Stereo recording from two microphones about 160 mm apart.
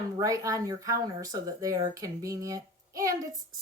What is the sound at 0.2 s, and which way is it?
Speech, 20° right (ahead or behind).